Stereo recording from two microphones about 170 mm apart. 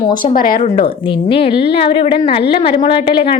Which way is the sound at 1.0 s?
30° left (ahead or behind).